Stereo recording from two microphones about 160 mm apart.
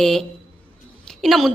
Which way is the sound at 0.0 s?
Centre (ahead or behind).